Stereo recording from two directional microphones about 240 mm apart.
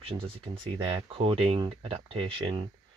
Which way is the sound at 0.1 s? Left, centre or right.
Right.